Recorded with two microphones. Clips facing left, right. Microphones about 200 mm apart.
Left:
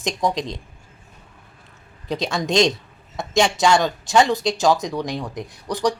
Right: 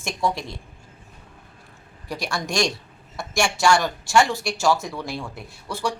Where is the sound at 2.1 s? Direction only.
20° left (ahead or behind).